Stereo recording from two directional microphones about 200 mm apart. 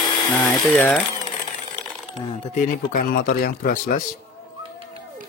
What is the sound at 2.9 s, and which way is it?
Speech, 45° left (ahead or behind).